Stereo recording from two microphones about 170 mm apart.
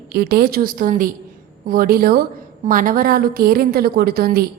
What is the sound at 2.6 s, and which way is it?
A woman's voice, 50° right (ahead or behind).